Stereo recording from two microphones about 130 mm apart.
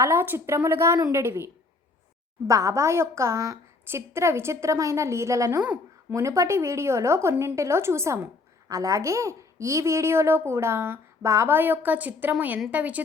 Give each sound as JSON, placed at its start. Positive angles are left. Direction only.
{"t": 0.0, "sound": "a woman's voice", "side_deg": -20}
{"t": 2.5, "sound": "a woman's voice", "side_deg": -25}
{"t": 5.6, "sound": "a sound", "side_deg": -10}
{"t": 6.1, "sound": "a woman's voice", "side_deg": -25}